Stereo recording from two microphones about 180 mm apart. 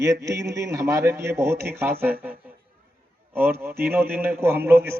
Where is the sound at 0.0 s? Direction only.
15° right (ahead or behind).